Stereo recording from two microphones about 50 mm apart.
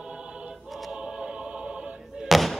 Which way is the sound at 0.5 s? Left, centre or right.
Centre.